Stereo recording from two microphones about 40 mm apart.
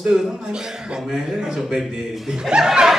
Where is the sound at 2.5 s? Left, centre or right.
Centre.